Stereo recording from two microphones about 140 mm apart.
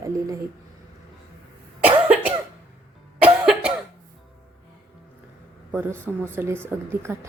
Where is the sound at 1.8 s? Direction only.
10° right (ahead or behind).